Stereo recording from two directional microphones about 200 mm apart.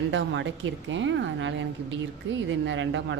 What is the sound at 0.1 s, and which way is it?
A woman's voice, 65° right (ahead or behind).